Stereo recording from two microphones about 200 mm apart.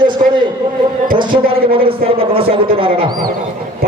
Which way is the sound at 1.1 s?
25° right (ahead or behind).